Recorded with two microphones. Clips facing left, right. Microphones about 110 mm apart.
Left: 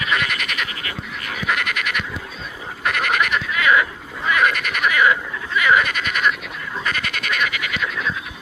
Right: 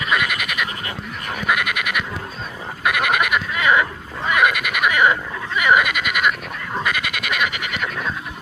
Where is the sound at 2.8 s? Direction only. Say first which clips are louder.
Right 1 dB; 15° right (ahead or behind).